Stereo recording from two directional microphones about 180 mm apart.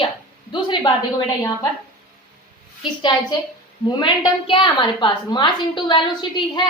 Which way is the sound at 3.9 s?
25° left (ahead or behind).